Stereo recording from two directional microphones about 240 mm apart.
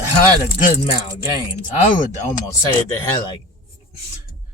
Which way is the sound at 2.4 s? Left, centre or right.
Centre.